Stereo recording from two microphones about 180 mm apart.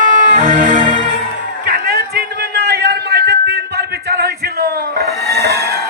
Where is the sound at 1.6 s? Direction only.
55° right (ahead or behind).